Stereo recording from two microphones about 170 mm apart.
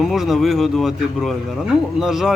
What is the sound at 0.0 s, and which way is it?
Speech, centre (ahead or behind).